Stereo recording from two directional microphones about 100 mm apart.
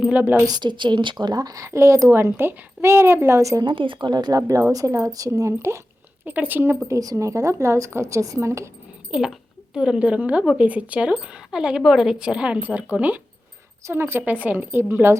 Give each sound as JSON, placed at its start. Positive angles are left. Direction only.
{"t": 0.0, "sound": "a woman's voice", "side_deg": -15}
{"t": 0.4, "sound": "speech", "side_deg": -45}
{"t": 3.6, "sound": "speech", "side_deg": -55}
{"t": 6.2, "sound": "a woman's voice", "side_deg": -20}
{"t": 6.8, "sound": "speech", "side_deg": -35}
{"t": 9.0, "sound": "a woman's voice", "side_deg": -5}